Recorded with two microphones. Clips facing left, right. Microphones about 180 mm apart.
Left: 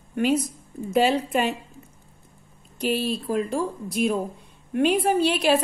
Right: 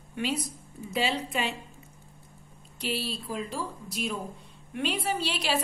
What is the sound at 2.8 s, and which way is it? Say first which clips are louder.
A woman's voice: left 8 dB; 50° left (ahead or behind).